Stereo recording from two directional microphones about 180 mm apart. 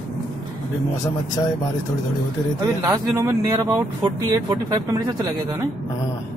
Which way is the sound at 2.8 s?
15° right (ahead or behind).